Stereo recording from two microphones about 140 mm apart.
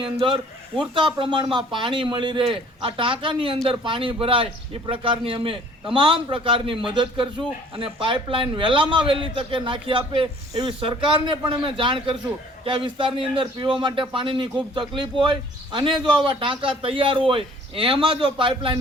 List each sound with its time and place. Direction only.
0.0 s a man's voice: 40° right (ahead or behind)